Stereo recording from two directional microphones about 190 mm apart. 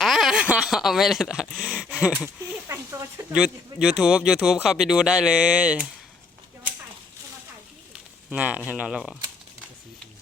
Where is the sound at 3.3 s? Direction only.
5° right (ahead or behind).